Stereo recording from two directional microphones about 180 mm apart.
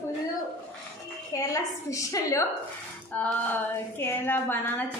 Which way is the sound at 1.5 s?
20° left (ahead or behind).